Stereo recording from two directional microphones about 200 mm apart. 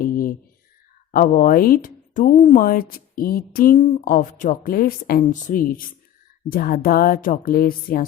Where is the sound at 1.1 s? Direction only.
45° left (ahead or behind).